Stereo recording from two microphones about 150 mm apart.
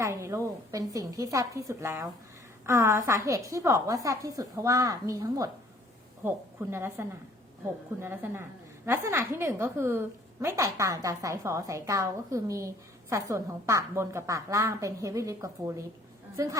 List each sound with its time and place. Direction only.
0.0 s a woman's voice: 20° right (ahead or behind)